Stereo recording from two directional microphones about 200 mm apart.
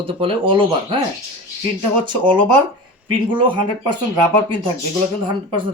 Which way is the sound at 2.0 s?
25° right (ahead or behind).